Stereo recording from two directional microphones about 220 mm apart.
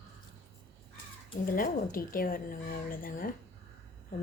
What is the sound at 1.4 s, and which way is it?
A woman's voice, 40° left (ahead or behind).